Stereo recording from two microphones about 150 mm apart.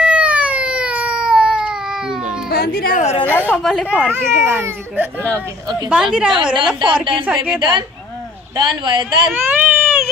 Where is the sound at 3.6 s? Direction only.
Centre (ahead or behind).